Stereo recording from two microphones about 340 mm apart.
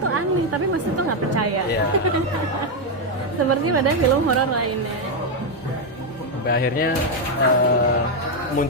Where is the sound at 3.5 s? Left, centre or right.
Right.